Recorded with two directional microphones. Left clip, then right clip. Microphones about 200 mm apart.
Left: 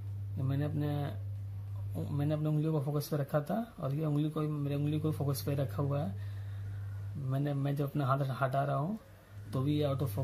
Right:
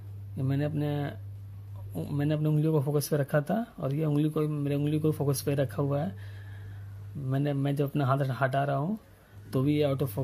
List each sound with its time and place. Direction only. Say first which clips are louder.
0.4 s a man's voice: right 6 dB; 35° right (ahead or behind)
7.2 s a man's voice: right 6 dB; 35° right (ahead or behind)